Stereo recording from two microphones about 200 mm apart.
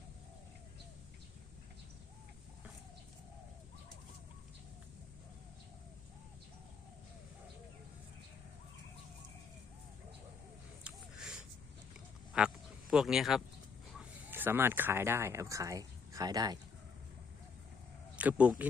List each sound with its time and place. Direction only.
10.8 s a sound: 5° right (ahead or behind)
12.3 s speech: 5° right (ahead or behind); by 16.6 s 20° right (ahead or behind)
18.2 s speech: 5° right (ahead or behind)